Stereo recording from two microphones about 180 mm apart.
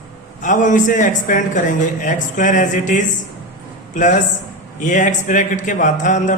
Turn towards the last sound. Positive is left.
turn(degrees=45)  # may be behind; listen again after turning